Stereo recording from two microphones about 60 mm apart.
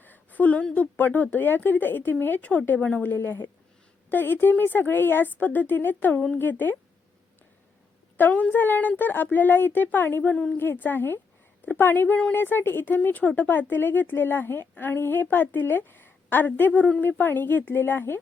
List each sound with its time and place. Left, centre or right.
0.0 s a woman's voice: left
8.1 s speech: left
10.3 s speech: centre
10.6 s speech: left